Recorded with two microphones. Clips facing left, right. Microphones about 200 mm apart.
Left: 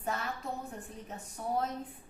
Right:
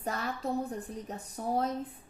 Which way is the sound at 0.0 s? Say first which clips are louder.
Right 2 dB; 35° right (ahead or behind).